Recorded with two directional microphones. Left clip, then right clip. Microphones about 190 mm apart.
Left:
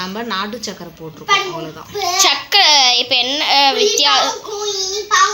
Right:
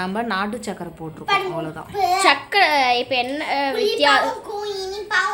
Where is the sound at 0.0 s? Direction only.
15° right (ahead or behind).